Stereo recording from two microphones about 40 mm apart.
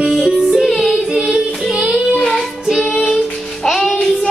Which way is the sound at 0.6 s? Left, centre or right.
Centre.